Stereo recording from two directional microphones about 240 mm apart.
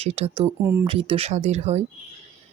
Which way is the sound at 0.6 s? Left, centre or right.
Centre.